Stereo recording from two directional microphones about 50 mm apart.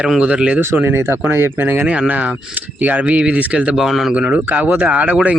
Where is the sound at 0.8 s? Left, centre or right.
Right.